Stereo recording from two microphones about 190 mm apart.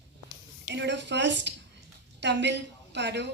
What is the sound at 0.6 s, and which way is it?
A woman's voice, 65° right (ahead or behind).